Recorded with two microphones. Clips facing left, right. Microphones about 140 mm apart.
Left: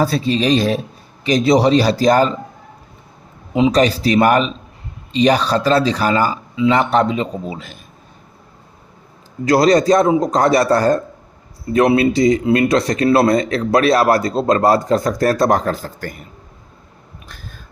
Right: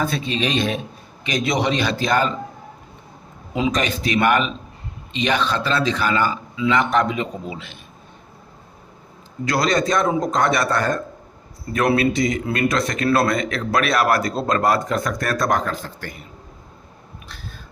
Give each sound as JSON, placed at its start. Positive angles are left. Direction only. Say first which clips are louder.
{"t": 0.0, "sound": "speech", "louder": "left 6 dB", "side_deg": 35}
{"t": 3.7, "sound": "speech", "louder": "left 7 dB", "side_deg": 35}
{"t": 9.4, "sound": "speech", "louder": "left 7 dB", "side_deg": 35}
{"t": 17.2, "sound": "a sound", "louder": "even", "side_deg": 45}